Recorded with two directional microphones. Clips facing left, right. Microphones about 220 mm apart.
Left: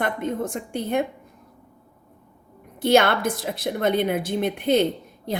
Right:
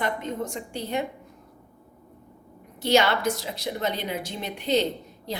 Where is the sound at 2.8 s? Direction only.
55° left (ahead or behind).